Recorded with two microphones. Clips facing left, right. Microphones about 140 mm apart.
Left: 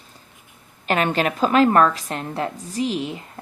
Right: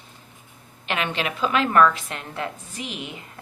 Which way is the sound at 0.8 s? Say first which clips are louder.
Left 6 dB; 45° left (ahead or behind).